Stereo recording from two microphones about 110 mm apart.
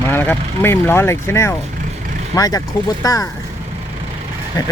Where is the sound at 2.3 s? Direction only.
35° left (ahead or behind).